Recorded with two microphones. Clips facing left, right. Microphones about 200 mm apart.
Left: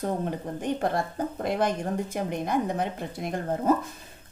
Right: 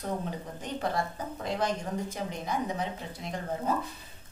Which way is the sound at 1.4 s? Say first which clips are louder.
Left 4 dB; 55° left (ahead or behind).